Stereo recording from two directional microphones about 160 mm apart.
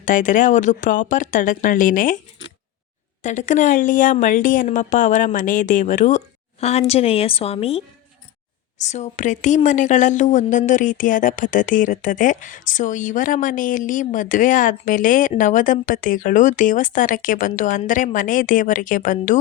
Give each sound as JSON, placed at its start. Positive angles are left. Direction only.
{"t": 0.0, "sound": "speech", "side_deg": 55}
{"t": 3.2, "sound": "speech", "side_deg": 50}